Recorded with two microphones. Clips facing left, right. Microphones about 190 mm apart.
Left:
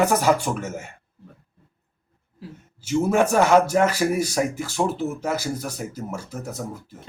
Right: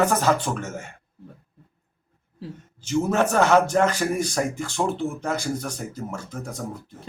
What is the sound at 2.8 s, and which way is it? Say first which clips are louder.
Speech: left 2 dB; 10° left (ahead or behind).